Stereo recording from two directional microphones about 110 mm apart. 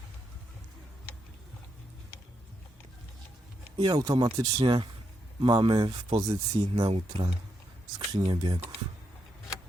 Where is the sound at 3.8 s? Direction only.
40° right (ahead or behind).